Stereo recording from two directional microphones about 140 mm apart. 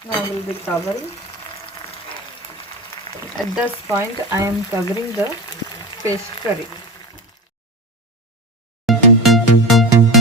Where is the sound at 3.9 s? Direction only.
20° right (ahead or behind).